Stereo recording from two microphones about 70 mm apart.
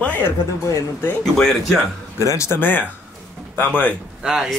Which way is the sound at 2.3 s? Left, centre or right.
Left.